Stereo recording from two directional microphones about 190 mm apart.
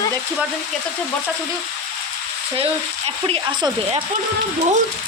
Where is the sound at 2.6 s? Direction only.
30° right (ahead or behind).